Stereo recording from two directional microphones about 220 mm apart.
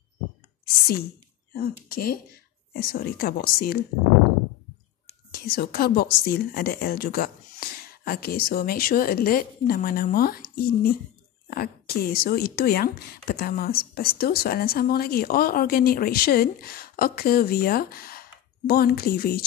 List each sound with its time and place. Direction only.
1.9 s speech: 45° left (ahead or behind)
5.5 s speech: 40° left (ahead or behind)